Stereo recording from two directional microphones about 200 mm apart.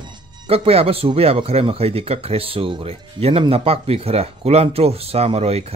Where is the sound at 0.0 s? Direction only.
30° right (ahead or behind).